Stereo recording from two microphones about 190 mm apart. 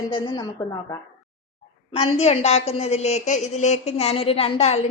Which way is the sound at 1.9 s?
30° left (ahead or behind).